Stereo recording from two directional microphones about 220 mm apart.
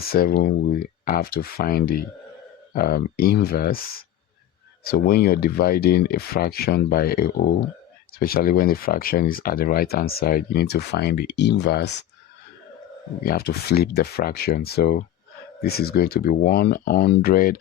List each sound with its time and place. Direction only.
0.0 s speech: 45° left (ahead or behind)
13.2 s speech: 45° left (ahead or behind)